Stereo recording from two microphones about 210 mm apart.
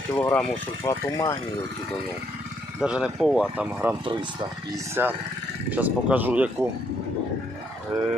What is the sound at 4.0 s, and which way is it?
Speech, 25° right (ahead or behind).